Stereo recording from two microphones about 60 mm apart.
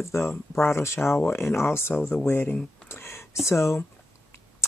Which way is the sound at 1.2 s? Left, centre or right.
Left.